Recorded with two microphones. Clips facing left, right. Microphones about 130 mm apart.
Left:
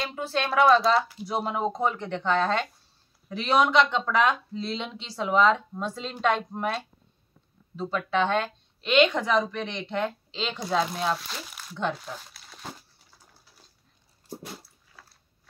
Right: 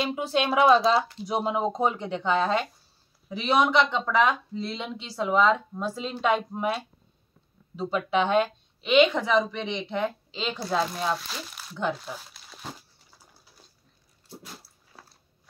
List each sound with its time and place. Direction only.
0.0 s speech: 15° right (ahead or behind)
8.8 s speech: 5° right (ahead or behind)